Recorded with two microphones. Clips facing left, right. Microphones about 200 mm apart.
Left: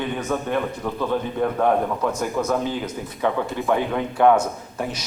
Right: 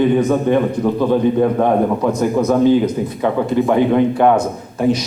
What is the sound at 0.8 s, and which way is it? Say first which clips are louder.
A man's voice: right 10 dB; 25° right (ahead or behind).